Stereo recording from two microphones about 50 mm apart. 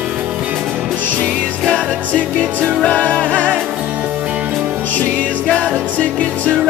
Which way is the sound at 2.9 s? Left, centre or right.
Left.